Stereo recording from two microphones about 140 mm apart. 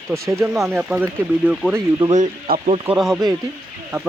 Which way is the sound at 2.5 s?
90° right.